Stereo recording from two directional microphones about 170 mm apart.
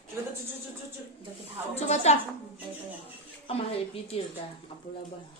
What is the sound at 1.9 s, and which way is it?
Speech, 40° left (ahead or behind).